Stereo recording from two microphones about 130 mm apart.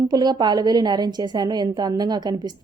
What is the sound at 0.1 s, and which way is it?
Speech, 30° right (ahead or behind).